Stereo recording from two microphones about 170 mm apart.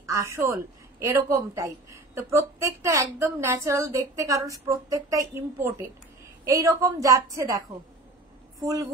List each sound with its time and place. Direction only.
0.0 s a woman's voice: 15° right (ahead or behind)